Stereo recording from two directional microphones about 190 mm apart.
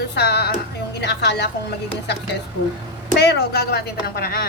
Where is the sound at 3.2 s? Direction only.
55° left (ahead or behind).